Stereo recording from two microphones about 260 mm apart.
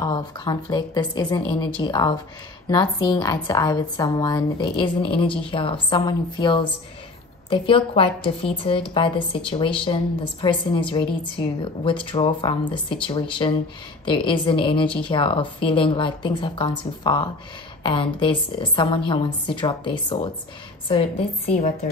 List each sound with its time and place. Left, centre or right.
0.0 s a woman's voice: centre